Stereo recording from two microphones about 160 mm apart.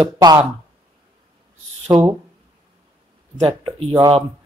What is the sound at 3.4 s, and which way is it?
Speech, 30° right (ahead or behind).